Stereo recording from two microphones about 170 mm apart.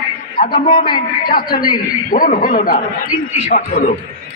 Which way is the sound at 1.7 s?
55° left (ahead or behind).